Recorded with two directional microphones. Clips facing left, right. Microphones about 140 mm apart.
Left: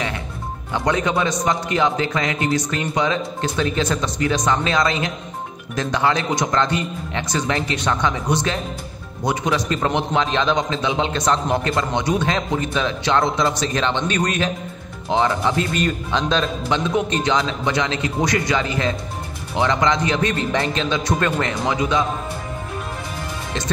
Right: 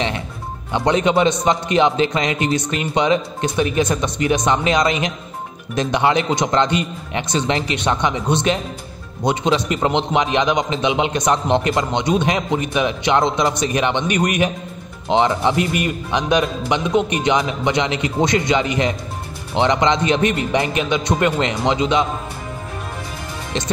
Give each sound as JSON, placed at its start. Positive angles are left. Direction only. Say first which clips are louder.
{"t": 0.7, "sound": "a man's voice", "louder": "right 4 dB", "side_deg": -20}